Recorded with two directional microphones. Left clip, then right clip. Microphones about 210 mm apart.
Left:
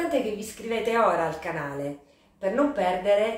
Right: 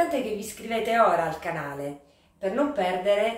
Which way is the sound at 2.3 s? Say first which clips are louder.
Left 1 dB; 10° left (ahead or behind).